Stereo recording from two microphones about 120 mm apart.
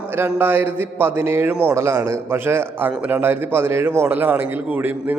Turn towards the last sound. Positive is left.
turn(degrees=-15)  # may be behind; listen again after turning